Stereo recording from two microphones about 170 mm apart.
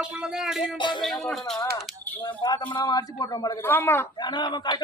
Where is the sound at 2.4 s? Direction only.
25° left (ahead or behind).